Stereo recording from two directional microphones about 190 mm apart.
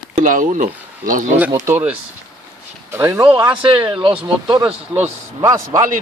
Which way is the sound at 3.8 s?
25° right (ahead or behind).